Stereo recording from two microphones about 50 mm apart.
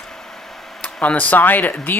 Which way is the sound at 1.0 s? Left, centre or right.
Left.